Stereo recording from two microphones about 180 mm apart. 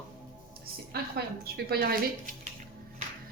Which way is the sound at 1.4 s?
55° right (ahead or behind).